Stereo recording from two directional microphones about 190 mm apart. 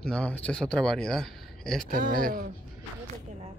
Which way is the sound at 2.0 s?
50° right (ahead or behind).